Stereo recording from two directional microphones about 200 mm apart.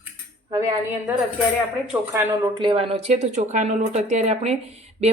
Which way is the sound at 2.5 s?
25° right (ahead or behind).